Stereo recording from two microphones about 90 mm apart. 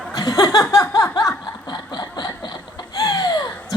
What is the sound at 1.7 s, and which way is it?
Snicker, 55° left (ahead or behind).